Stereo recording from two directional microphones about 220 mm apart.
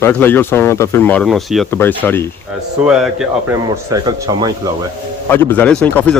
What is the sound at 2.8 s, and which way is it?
Speech, 5° right (ahead or behind).